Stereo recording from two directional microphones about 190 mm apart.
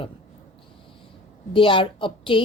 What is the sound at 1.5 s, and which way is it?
Speech, 25° left (ahead or behind).